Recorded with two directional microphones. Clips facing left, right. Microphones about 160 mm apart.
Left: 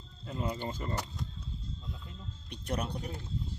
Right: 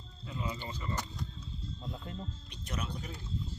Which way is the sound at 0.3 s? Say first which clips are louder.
Left 4 dB; 50° left (ahead or behind).